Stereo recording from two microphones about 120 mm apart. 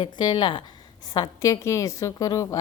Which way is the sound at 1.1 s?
30° left (ahead or behind).